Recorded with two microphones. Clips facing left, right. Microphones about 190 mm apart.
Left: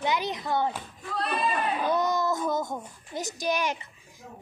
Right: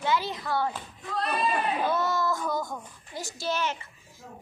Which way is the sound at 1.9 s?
15° left (ahead or behind).